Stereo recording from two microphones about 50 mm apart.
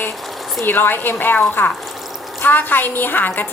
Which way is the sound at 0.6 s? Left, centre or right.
Left.